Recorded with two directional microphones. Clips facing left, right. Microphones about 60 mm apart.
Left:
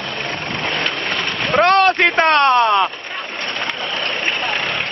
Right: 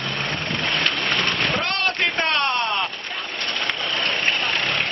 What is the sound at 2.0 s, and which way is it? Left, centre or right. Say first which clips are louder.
Speech: left 8 dB; left.